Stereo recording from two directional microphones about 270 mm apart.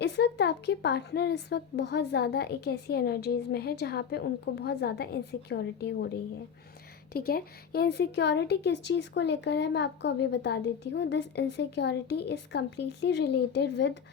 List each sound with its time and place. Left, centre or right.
0.0 s speech: left
7.1 s speech: left